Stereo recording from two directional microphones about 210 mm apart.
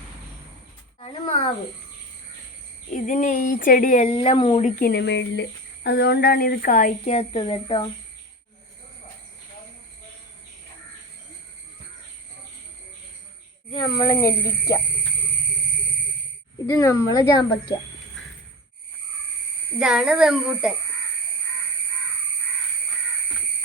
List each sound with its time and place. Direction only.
0.9 s speech: 25° left (ahead or behind)
2.9 s speech: 35° left (ahead or behind)
4.8 s speech: 50° left (ahead or behind); by 7.9 s 25° left (ahead or behind)
13.8 s speech: 20° left (ahead or behind)
16.6 s speech: 15° left (ahead or behind)
19.8 s speech: 5° right (ahead or behind)